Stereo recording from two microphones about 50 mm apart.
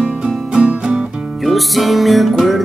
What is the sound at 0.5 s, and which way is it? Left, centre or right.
Music, centre.